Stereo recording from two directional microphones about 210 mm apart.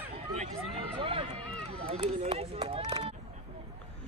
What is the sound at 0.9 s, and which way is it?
Speech, 25° right (ahead or behind).